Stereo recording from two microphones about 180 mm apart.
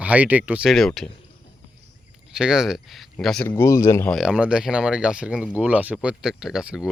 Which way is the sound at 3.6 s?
15° left (ahead or behind).